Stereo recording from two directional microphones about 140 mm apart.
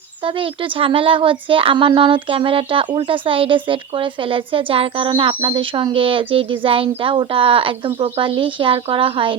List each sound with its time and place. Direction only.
0.2 s speech: 40° right (ahead or behind)